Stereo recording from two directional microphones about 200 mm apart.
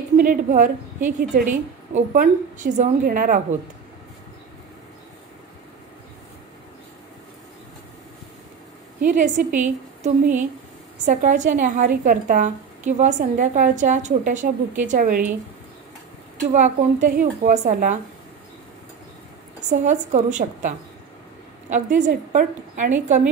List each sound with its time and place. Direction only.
0.2 s a woman's voice: 40° right (ahead or behind)
9.0 s a woman's voice: 40° right (ahead or behind)
16.5 s a woman's voice: 40° right (ahead or behind)
19.7 s a woman's voice: 35° right (ahead or behind)